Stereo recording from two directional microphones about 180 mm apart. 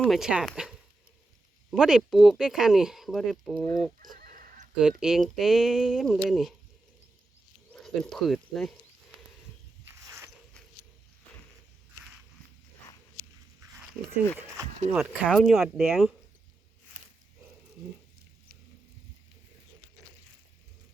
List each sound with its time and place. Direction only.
0.0 s speech: 5° right (ahead or behind)
1.7 s speech: centre (ahead or behind)
4.2 s a sound: 50° right (ahead or behind)
4.8 s speech: 5° right (ahead or behind)
7.7 s speech: centre (ahead or behind)
14.3 s a sound: 15° right (ahead or behind)
14.9 s speech: 5° right (ahead or behind)